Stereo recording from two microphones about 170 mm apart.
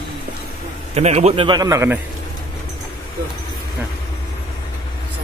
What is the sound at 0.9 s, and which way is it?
A man's voice, 40° right (ahead or behind).